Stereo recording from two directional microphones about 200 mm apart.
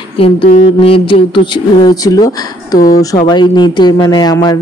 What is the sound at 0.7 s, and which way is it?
A woman's voice, 25° left (ahead or behind).